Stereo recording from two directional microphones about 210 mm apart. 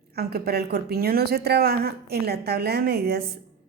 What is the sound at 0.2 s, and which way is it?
A woman's voice, 50° right (ahead or behind).